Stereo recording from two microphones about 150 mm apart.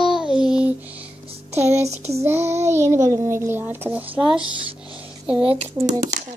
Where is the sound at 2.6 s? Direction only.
20° right (ahead or behind).